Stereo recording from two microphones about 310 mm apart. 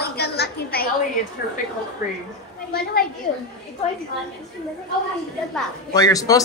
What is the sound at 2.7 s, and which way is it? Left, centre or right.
Speech, left.